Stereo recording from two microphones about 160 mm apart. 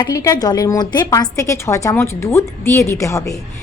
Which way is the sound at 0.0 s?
25° left (ahead or behind).